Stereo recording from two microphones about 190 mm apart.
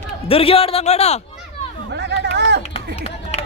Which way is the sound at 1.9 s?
65° right (ahead or behind).